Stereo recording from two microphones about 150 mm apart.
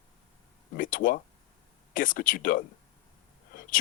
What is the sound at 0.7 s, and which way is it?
Speech, 65° left (ahead or behind).